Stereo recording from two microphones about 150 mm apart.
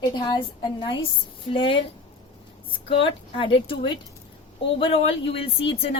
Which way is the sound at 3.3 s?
35° left (ahead or behind).